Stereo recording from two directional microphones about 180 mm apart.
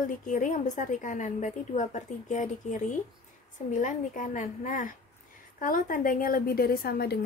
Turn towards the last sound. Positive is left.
turn(degrees=60)  # may be behind; listen again after turning